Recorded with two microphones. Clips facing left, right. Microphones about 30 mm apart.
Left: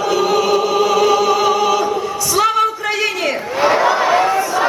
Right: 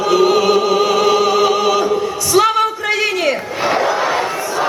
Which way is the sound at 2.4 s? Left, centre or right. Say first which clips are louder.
Right 2 dB; centre.